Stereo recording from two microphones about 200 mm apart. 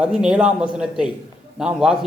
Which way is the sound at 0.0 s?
5° right (ahead or behind).